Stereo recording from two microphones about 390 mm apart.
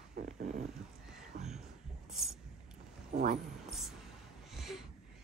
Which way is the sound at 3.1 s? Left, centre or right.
Right.